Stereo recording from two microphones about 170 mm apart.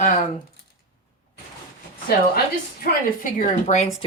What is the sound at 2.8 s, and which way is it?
Speech, 55° left (ahead or behind).